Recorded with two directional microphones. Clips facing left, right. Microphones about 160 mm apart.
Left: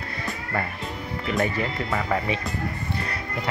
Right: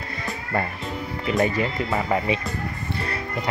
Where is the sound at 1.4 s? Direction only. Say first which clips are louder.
Right 3 dB; 20° right (ahead or behind).